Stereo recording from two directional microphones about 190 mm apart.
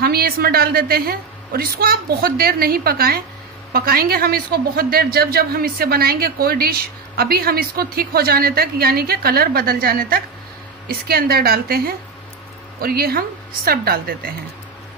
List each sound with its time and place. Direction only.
0.0 s a man's voice: 55° right (ahead or behind)